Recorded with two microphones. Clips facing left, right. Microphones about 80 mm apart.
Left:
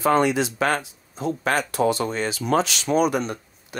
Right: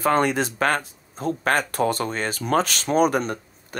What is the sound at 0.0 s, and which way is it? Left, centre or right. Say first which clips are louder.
Speech: left 1 dB; right.